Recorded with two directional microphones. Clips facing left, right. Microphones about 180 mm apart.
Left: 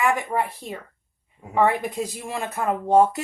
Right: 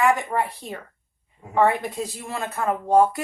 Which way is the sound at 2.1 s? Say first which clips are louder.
Left 1 dB; 15° left (ahead or behind).